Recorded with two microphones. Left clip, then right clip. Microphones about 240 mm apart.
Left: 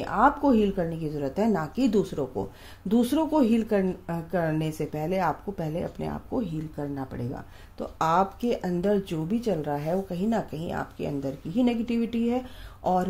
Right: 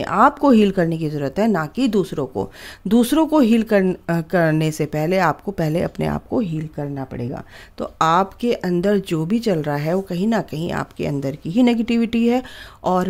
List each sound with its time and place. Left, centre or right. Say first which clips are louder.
0.0 s speech: right 7 dB; right